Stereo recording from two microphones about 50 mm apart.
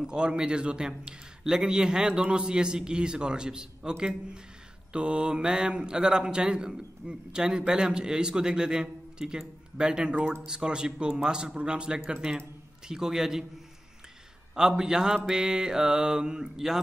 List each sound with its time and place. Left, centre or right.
0.0 s a man's voice: centre
14.5 s a man's voice: centre